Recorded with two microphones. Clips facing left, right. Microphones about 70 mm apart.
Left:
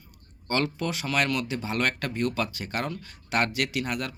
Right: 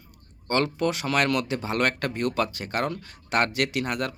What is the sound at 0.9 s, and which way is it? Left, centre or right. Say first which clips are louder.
Speech: right 3 dB; right.